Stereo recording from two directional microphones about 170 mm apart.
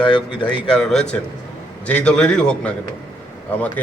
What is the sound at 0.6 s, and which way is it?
A man's voice, 5° left (ahead or behind).